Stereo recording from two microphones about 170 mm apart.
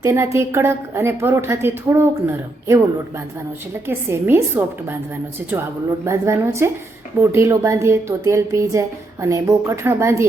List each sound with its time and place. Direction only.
0.0 s a woman's voice: 15° right (ahead or behind)
3.8 s a woman's voice: 15° right (ahead or behind)
6.1 s a woman's voice: 15° right (ahead or behind)